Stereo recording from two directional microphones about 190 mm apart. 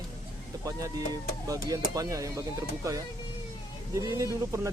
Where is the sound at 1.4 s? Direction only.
20° right (ahead or behind).